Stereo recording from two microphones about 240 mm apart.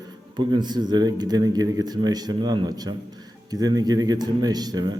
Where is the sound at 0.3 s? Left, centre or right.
Centre.